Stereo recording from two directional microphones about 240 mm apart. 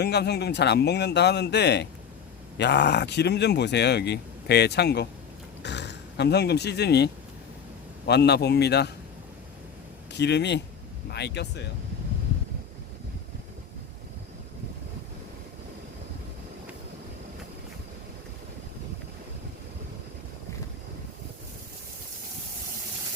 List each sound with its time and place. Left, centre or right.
0.0 s speech: left
10.1 s a man's voice: left